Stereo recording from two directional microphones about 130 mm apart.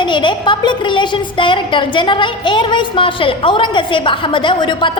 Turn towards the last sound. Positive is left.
turn(degrees=40)  # may be behind; listen again after turning